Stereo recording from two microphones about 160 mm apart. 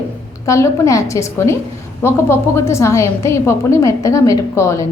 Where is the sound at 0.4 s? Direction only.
20° left (ahead or behind).